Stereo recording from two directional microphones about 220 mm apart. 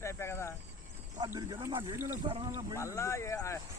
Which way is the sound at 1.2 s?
20° right (ahead or behind).